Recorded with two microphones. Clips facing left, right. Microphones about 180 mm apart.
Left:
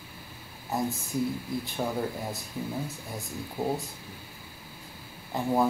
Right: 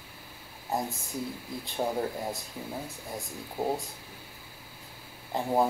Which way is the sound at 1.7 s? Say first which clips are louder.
Right 3 dB; 20° right (ahead or behind).